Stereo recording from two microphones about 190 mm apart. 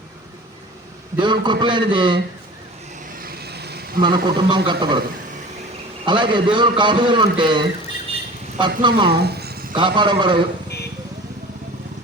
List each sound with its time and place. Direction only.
1.2 s a man's voice: 25° right (ahead or behind)
3.2 s vehicle: 55° right (ahead or behind)
4.0 s a man's voice: 25° right (ahead or behind)
6.1 s a man's voice: 25° right (ahead or behind)
9.0 s a sound: 60° right (ahead or behind)
9.7 s a man's voice: 25° right (ahead or behind)